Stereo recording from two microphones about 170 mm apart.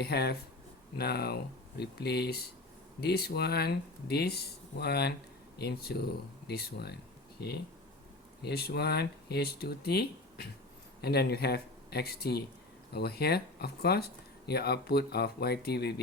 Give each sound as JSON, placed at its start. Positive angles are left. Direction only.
{"t": 0.0, "sound": "speech", "side_deg": 70}